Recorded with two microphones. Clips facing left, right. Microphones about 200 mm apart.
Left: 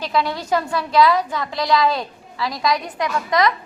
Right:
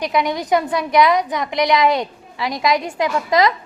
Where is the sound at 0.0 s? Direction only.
15° right (ahead or behind).